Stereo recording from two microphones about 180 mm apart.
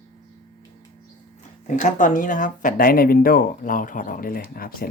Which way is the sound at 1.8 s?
45° left (ahead or behind).